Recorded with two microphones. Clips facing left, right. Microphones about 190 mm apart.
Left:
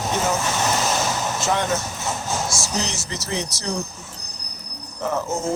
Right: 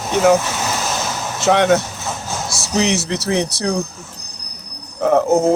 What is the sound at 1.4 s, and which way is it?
Speech, 70° right (ahead or behind).